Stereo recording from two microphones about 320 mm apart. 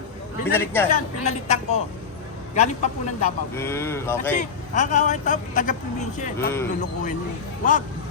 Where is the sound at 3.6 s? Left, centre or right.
Centre.